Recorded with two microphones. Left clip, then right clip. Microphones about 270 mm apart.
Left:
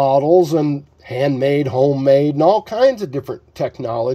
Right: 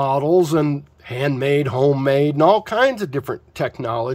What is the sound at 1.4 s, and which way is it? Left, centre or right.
Speech, centre.